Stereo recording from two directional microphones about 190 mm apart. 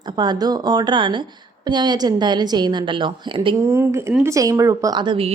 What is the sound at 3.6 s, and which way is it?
A woman's voice, 10° right (ahead or behind).